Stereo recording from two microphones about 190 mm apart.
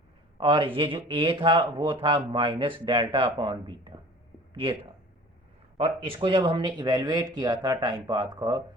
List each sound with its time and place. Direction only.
0.3 s speech: 25° right (ahead or behind)